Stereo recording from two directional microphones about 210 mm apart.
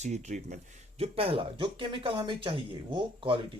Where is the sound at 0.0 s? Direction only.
35° right (ahead or behind).